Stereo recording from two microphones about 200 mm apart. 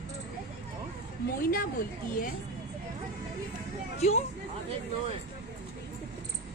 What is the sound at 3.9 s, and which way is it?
Speech, 35° left (ahead or behind).